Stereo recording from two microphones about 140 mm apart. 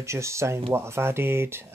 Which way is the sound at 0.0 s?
20° right (ahead or behind).